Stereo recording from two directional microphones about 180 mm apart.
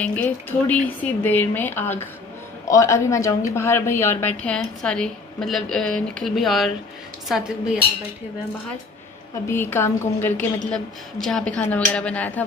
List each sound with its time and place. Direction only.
0.0 s a woman's voice: 10° left (ahead or behind)
9.5 s a woman's voice: 15° left (ahead or behind)